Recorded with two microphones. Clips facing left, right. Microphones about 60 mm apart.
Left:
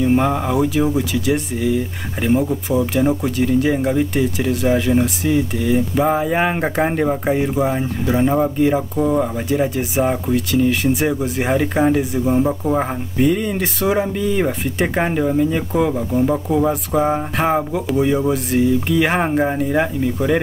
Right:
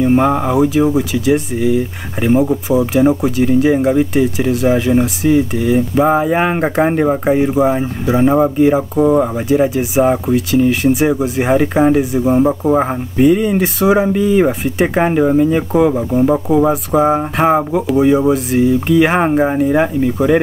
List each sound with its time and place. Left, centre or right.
0.0 s speech: centre
9.5 s speech: centre